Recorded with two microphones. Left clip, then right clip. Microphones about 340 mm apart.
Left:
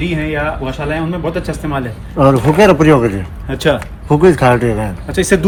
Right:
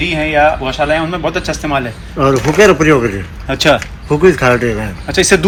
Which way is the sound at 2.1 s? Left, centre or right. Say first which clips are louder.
Left 1 dB; left.